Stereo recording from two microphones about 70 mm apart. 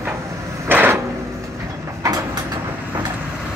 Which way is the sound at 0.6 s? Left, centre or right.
Right.